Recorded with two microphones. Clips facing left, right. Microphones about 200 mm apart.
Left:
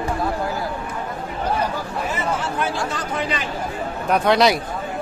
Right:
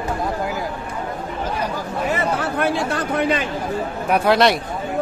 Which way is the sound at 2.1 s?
60° right (ahead or behind).